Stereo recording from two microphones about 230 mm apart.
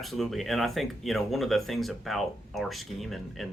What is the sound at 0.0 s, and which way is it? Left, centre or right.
Speech, centre.